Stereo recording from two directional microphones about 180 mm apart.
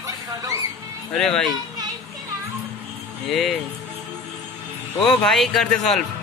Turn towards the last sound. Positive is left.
turn(degrees=0)  # may be behind; listen again after turning